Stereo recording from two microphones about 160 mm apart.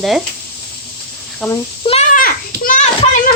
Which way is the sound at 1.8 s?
30° left (ahead or behind).